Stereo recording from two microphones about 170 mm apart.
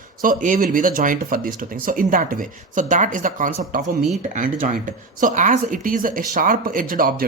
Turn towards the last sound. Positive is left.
turn(degrees=-55)  # may be behind; listen again after turning